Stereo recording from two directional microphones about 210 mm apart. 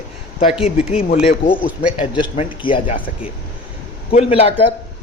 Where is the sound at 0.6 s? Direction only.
30° left (ahead or behind).